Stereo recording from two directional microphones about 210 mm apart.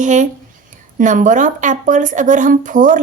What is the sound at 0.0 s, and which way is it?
Speech, 35° right (ahead or behind).